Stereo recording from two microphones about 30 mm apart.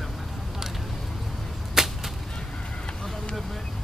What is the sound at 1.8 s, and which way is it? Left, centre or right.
Whip, centre.